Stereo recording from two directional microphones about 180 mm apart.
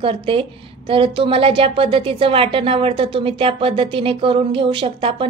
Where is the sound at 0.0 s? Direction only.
30° right (ahead or behind).